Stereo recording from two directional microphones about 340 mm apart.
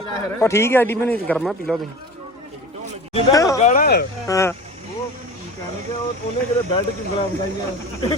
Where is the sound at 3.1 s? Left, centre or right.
Centre.